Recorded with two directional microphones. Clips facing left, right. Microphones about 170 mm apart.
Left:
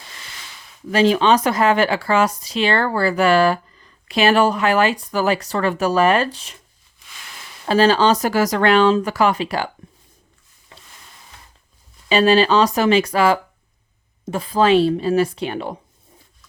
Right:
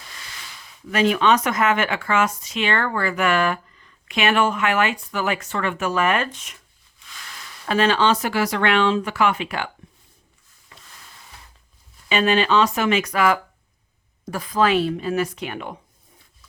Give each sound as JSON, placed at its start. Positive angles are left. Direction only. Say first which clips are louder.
{"t": 0.9, "sound": "speech", "louder": "left 3 dB", "side_deg": 30}
{"t": 7.6, "sound": "speech", "louder": "left 4 dB", "side_deg": 35}
{"t": 12.0, "sound": "speech", "louder": "left 5 dB", "side_deg": 35}